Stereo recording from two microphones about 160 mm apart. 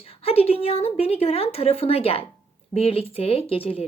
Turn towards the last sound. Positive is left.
turn(degrees=35)  # may be behind; listen again after turning